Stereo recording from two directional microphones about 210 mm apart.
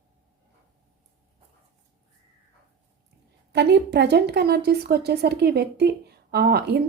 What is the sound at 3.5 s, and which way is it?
A woman's voice, 55° right (ahead or behind).